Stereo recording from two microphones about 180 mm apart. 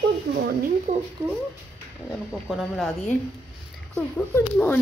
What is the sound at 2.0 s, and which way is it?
Speech, centre (ahead or behind).